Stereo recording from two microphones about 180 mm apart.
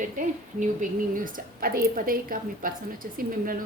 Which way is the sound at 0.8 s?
50° right (ahead or behind).